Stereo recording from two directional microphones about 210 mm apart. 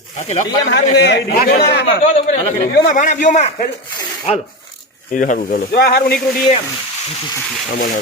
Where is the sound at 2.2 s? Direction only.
35° left (ahead or behind).